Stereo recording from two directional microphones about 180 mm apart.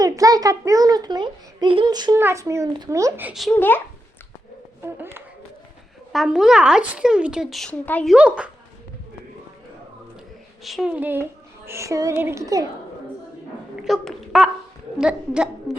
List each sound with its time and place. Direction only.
0.0 s a child's voice: 20° right (ahead or behind); by 3.6 s centre (ahead or behind)
4.8 s a woman's voice: 10° right (ahead or behind); by 8.1 s 5° left (ahead or behind)
8.1 s a woman's voice: 5° right (ahead or behind)
10.6 s a woman's voice: centre (ahead or behind); by 12.6 s 20° right (ahead or behind)
13.8 s speech: centre (ahead or behind)